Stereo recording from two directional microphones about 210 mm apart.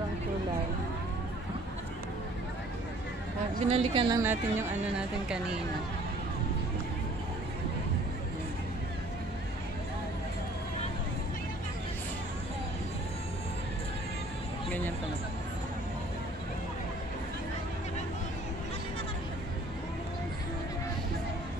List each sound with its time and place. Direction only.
3.6 s speech: 25° right (ahead or behind)
4.2 s speech: 10° right (ahead or behind)